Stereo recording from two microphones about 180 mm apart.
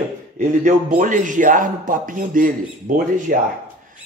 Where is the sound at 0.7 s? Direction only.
45° right (ahead or behind).